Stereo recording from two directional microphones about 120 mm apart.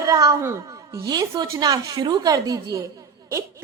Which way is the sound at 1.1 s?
35° right (ahead or behind).